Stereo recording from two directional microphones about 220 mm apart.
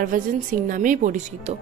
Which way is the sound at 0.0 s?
40° right (ahead or behind).